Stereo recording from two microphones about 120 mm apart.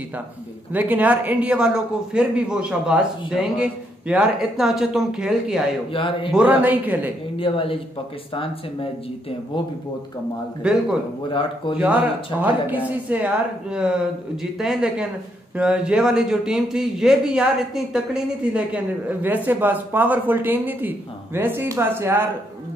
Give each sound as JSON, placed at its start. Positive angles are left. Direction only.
{"t": 0.7, "sound": "a man's voice", "side_deg": -15}
{"t": 5.9, "sound": "speech", "side_deg": 45}
{"t": 6.3, "sound": "a man's voice", "side_deg": -10}
{"t": 7.3, "sound": "speech", "side_deg": 50}
{"t": 10.6, "sound": "a man's voice", "side_deg": -5}
{"t": 11.2, "sound": "speech", "side_deg": 45}
{"t": 11.8, "sound": "a man's voice", "side_deg": -10}